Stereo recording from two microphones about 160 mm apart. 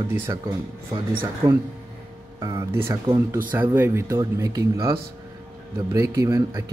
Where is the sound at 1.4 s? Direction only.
30° right (ahead or behind).